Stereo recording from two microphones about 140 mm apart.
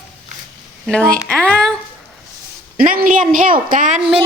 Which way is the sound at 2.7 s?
90° right.